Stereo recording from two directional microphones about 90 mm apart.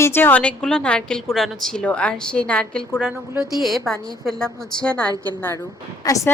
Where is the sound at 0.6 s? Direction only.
10° left (ahead or behind).